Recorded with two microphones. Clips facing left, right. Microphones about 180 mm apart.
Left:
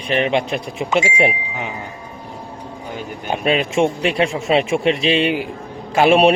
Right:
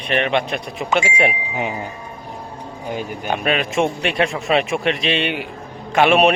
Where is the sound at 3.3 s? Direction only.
25° left (ahead or behind).